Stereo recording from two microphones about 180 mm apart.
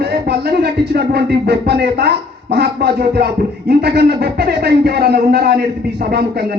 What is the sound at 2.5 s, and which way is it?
Speech, 65° right (ahead or behind).